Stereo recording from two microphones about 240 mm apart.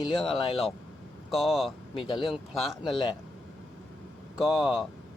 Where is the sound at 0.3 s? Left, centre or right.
Left.